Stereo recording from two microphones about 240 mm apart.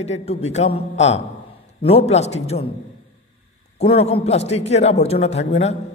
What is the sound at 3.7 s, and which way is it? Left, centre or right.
A woman's voice, left.